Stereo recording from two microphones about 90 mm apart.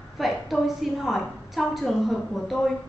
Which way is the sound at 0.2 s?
Centre (ahead or behind).